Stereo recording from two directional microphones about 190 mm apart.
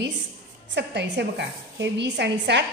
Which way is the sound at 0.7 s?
65° right (ahead or behind).